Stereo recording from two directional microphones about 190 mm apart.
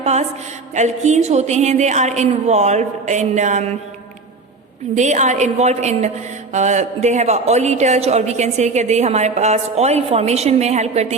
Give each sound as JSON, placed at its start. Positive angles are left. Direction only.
{"t": 0.0, "sound": "a woman's voice", "side_deg": -35}
{"t": 4.9, "sound": "speech", "side_deg": -40}